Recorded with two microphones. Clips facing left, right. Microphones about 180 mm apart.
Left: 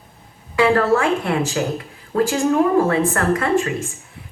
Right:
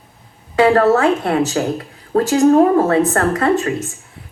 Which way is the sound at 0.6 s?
40° right (ahead or behind).